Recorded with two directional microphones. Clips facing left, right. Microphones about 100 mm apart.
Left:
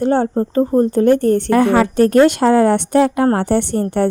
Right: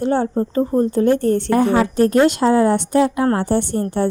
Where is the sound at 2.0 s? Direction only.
5° right (ahead or behind).